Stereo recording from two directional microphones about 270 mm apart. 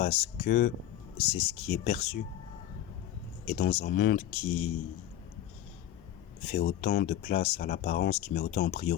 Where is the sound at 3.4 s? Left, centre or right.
Left.